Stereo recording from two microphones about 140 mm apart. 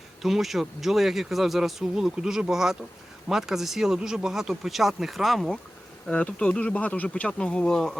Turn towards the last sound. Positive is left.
turn(degrees=5)  # may be behind; listen again after turning